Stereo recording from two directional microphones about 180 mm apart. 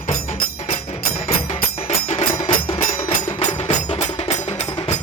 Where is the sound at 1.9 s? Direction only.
35° left (ahead or behind).